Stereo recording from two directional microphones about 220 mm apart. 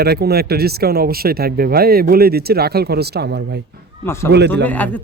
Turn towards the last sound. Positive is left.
turn(degrees=5)  # may be behind; listen again after turning